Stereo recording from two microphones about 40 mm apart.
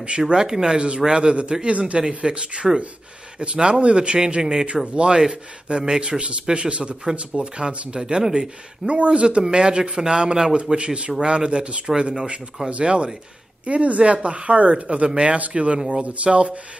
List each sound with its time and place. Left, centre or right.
0.3 s speech: centre; by 2.0 s right
2.0 s speech: right
4.4 s speech: centre
8.8 s speech: right